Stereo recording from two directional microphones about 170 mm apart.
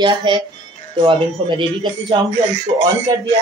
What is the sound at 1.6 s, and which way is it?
Speech, 25° right (ahead or behind).